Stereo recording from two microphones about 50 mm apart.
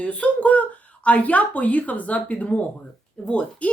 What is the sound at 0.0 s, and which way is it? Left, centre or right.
Speech, left.